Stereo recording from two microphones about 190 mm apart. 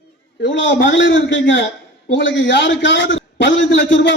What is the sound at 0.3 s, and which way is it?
A man's voice, 75° left (ahead or behind).